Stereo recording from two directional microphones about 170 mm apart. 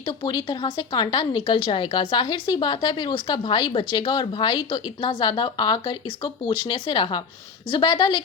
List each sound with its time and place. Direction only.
0.0 s a woman's voice: 25° left (ahead or behind)